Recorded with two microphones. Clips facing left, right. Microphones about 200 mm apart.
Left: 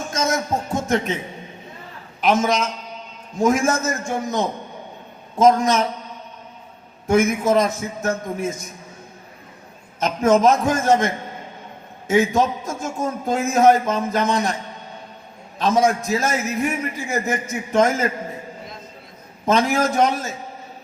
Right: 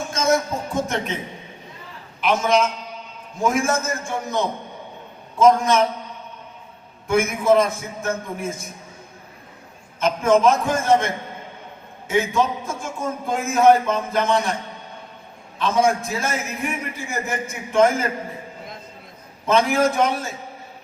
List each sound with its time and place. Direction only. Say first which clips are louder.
0.1 s music: right 2 dB; 45° left (ahead or behind)
2.2 s a man's voice: even; 45° left (ahead or behind)
7.1 s a man's voice: left 1 dB; 45° left (ahead or behind)
10.0 s a man's voice: left 1 dB; 45° left (ahead or behind)
15.5 s a man's voice: left 1 dB; 45° left (ahead or behind)
19.5 s a man's voice: even; 40° left (ahead or behind)